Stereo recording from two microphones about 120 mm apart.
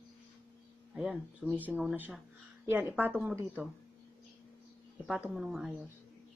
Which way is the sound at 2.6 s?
20° right (ahead or behind).